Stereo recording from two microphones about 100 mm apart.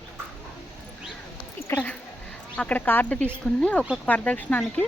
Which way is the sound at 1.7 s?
25° left (ahead or behind).